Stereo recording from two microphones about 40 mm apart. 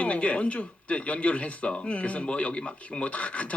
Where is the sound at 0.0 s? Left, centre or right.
Left.